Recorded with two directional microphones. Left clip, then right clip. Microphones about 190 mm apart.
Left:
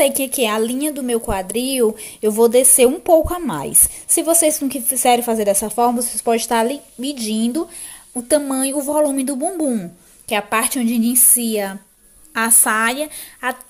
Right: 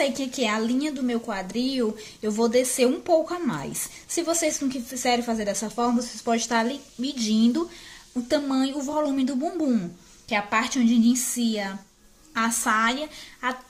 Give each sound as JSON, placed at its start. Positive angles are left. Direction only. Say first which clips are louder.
{"t": 0.0, "sound": "a woman's voice", "louder": "left 8 dB", "side_deg": 40}
{"t": 8.3, "sound": "a woman's voice", "louder": "left 7 dB", "side_deg": 30}